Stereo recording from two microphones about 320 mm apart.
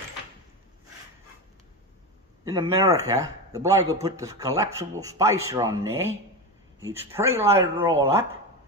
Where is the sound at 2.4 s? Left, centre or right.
Centre.